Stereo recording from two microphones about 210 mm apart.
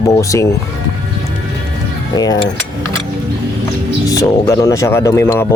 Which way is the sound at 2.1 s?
20° left (ahead or behind).